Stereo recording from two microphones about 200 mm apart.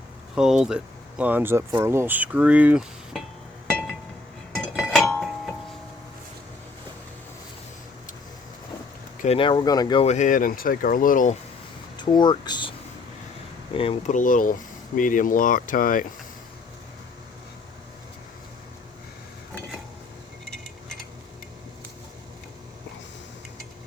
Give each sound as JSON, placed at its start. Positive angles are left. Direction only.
{"t": 0.3, "sound": "speech", "side_deg": -5}
{"t": 4.6, "sound": "chink", "side_deg": 0}
{"t": 9.2, "sound": "speech", "side_deg": 30}
{"t": 11.9, "sound": "speech", "side_deg": 20}
{"t": 13.7, "sound": "speech", "side_deg": 25}
{"t": 14.1, "sound": "speech", "side_deg": 40}